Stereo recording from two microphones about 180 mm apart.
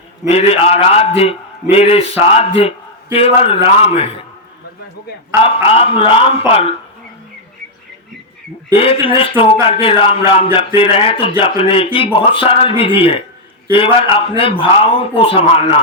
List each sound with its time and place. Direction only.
0.3 s a man's voice: 35° left (ahead or behind)
5.6 s a man's voice: 30° left (ahead or behind)
8.7 s a man's voice: 30° left (ahead or behind)